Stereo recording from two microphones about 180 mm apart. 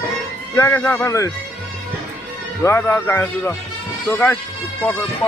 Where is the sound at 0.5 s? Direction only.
15° left (ahead or behind).